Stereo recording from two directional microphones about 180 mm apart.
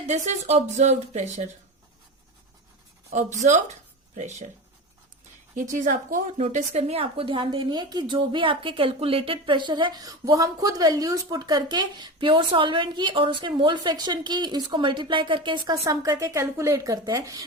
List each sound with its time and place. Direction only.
0.1 s speech: 40° right (ahead or behind)
3.1 s speech: 40° right (ahead or behind)
5.6 s a woman's voice: 45° right (ahead or behind); by 17.4 s 20° right (ahead or behind)